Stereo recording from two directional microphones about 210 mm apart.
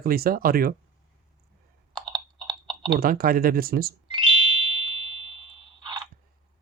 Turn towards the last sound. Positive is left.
turn(degrees=-25)  # may be behind; listen again after turning